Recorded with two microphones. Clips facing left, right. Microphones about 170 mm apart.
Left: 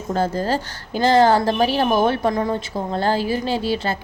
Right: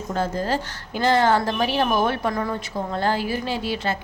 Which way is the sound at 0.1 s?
35° left (ahead or behind).